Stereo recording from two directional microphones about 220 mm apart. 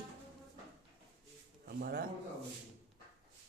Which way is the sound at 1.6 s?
45° right (ahead or behind).